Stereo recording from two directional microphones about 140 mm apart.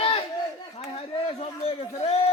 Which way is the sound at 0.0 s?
40° left (ahead or behind).